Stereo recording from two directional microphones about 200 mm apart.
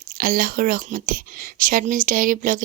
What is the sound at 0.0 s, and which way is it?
Speech, 45° right (ahead or behind).